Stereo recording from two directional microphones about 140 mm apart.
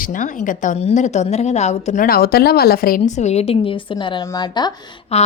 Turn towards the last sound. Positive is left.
turn(degrees=50)  # may be behind; listen again after turning